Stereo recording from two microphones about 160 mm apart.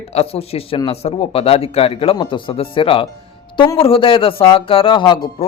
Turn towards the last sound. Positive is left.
turn(degrees=25)  # may be behind; listen again after turning